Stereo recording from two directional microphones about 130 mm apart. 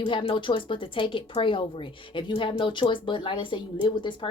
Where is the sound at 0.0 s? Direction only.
45° left (ahead or behind).